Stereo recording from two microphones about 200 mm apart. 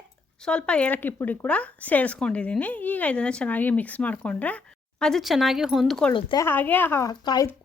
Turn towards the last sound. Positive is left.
turn(degrees=20)  # may be behind; listen again after turning